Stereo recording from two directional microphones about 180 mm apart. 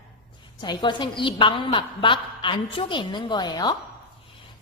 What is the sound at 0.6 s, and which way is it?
A woman's voice, 25° left (ahead or behind).